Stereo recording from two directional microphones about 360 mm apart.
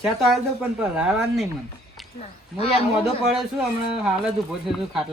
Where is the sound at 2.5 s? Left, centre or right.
Centre.